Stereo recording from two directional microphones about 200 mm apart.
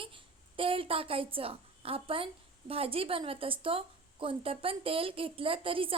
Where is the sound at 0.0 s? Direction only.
25° right (ahead or behind).